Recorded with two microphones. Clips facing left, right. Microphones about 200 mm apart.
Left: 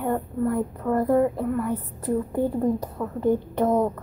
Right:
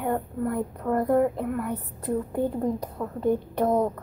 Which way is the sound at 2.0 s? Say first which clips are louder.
Left 2 dB; 20° right (ahead or behind).